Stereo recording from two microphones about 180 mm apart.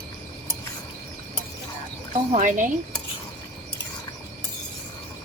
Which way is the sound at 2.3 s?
45° right (ahead or behind).